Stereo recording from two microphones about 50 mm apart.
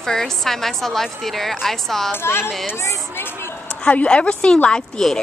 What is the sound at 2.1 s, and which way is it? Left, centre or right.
Speech, left.